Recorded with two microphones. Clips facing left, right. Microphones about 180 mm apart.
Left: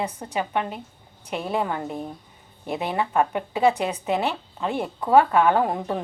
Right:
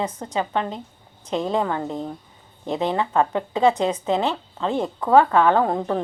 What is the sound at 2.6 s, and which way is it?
A woman's voice, 10° left (ahead or behind).